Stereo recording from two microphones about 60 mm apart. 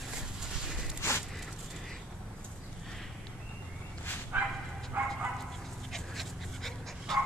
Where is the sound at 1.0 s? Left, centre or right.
Left.